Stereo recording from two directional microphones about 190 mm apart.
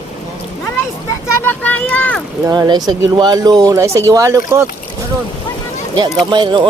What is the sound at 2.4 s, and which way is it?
Speech, 20° right (ahead or behind).